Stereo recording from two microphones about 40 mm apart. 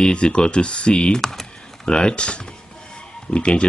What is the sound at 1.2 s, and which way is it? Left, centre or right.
Speech, centre.